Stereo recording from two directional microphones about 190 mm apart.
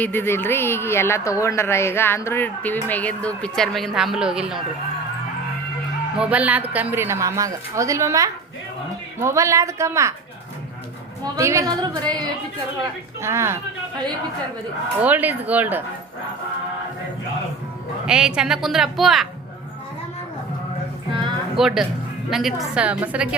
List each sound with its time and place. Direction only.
0.0 s a woman's voice: 10° left (ahead or behind); by 4.6 s 5° right (ahead or behind)
6.1 s a woman's voice: 5° right (ahead or behind)
11.2 s a woman's voice: 15° right (ahead or behind)
13.2 s a woman's voice: 15° right (ahead or behind)
15.0 s a woman's voice: 10° right (ahead or behind)
18.0 s speech: 5° right (ahead or behind)
21.5 s speech: centre (ahead or behind)